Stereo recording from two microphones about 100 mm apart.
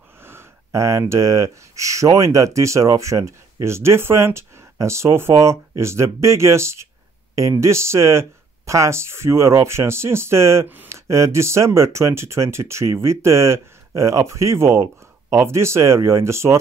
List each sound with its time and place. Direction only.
0.2 s speech: 25° right (ahead or behind)